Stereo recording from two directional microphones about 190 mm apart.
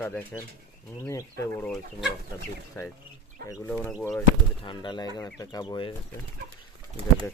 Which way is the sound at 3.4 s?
50° right (ahead or behind).